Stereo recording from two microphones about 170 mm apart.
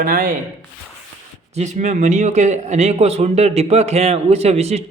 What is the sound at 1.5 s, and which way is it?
A man's voice, 45° right (ahead or behind).